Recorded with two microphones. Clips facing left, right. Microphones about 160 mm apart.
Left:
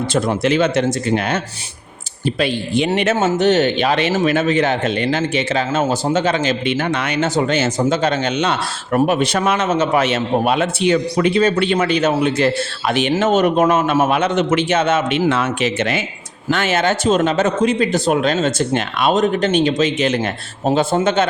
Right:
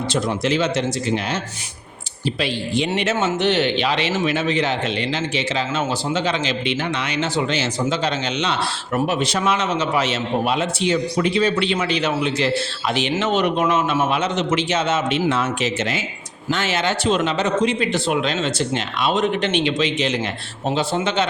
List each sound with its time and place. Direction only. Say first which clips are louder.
0.1 s speech: left 4 dB; 55° left (ahead or behind)